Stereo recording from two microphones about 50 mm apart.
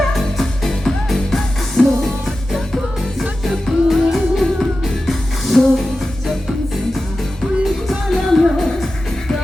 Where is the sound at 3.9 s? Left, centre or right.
Centre.